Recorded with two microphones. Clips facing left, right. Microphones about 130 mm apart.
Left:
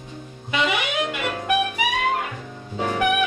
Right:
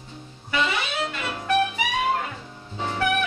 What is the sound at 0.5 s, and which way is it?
Saxophone, 15° left (ahead or behind).